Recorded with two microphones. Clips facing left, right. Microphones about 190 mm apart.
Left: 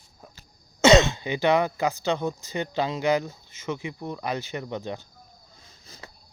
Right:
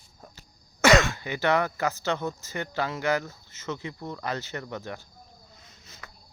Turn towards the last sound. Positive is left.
turn(degrees=30)  # may be behind; listen again after turning